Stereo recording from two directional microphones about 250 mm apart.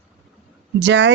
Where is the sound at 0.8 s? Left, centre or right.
Right.